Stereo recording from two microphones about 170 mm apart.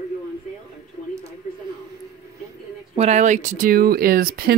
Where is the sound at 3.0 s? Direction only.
40° right (ahead or behind); by 4.5 s 65° right (ahead or behind).